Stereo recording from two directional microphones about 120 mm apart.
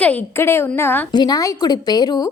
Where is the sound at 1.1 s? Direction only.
35° left (ahead or behind).